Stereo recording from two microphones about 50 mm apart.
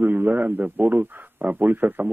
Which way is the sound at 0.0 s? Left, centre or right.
Right.